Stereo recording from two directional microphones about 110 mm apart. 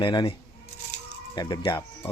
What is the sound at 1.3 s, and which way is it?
Speech, 40° left (ahead or behind).